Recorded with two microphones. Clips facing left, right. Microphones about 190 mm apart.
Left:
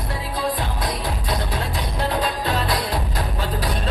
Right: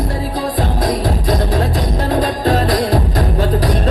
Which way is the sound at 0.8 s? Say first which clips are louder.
Right 9 dB; 45° right (ahead or behind).